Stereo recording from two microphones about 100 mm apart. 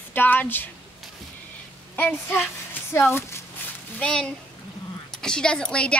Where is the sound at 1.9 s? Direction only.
20° left (ahead or behind).